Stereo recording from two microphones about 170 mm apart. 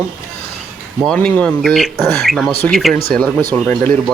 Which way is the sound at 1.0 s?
5° left (ahead or behind).